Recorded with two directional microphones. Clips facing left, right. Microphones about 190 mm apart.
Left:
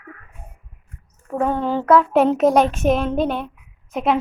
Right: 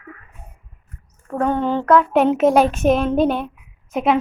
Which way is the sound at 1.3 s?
5° left (ahead or behind).